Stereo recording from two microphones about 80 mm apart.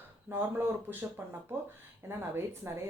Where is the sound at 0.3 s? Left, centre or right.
Right.